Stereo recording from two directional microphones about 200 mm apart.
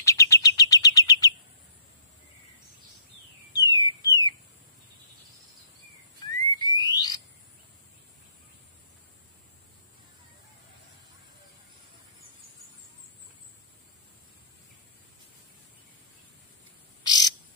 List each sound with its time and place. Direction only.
0.0 s bird: 15° left (ahead or behind)
3.5 s bird: 15° left (ahead or behind)
6.2 s frog: 20° left (ahead or behind)
17.0 s frog: 20° left (ahead or behind)